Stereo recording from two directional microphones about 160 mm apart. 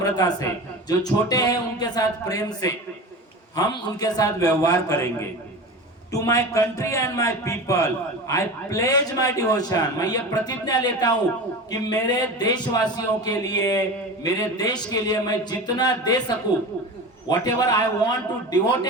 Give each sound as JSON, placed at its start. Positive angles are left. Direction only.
{"t": 0.0, "sound": "a man's voice", "side_deg": 25}
{"t": 3.5, "sound": "a man's voice", "side_deg": 25}
{"t": 6.1, "sound": "a man's voice", "side_deg": 20}